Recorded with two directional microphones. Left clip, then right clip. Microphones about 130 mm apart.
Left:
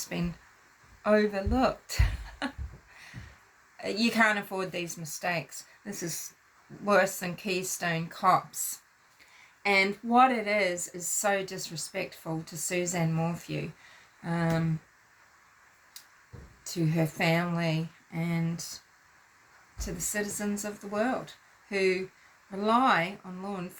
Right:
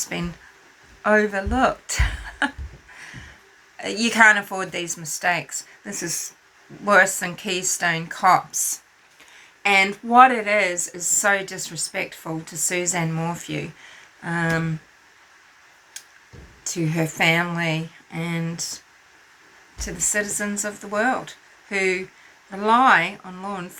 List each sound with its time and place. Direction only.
1.0 s speech: 25° left (ahead or behind)
1.5 s a sound: 25° left (ahead or behind)
3.8 s speech: 30° left (ahead or behind)
9.6 s speech: 25° left (ahead or behind)
16.6 s speech: 25° left (ahead or behind)
19.8 s speech: 25° left (ahead or behind)